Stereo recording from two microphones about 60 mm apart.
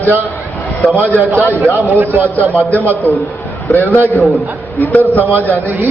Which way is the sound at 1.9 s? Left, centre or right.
Right.